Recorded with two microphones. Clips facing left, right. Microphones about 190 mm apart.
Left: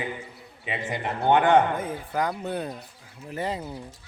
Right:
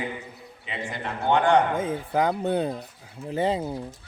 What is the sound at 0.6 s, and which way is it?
Speech, 15° left (ahead or behind).